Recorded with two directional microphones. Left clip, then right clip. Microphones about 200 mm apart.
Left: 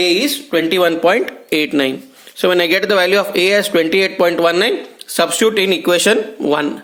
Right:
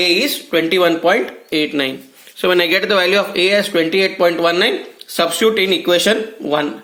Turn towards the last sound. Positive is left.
turn(degrees=40)  # may be behind; listen again after turning